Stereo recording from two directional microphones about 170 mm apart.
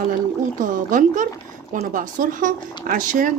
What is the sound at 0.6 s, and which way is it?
Speech, 50° right (ahead or behind).